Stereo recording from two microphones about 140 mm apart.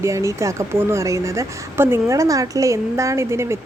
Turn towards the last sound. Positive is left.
turn(degrees=-20)  # may be behind; listen again after turning